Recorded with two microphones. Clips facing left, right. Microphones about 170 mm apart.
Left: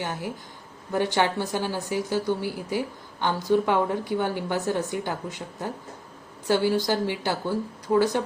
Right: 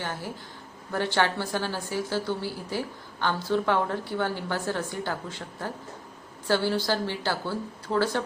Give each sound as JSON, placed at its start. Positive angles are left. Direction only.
{"t": 0.0, "sound": "a woman's voice", "side_deg": 15}